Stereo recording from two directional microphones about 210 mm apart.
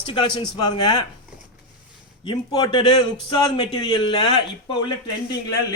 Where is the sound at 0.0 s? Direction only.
25° left (ahead or behind).